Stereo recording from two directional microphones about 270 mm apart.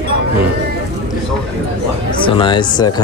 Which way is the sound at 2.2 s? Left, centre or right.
Centre.